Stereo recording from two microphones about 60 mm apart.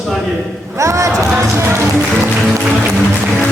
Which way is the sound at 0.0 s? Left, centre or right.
Centre.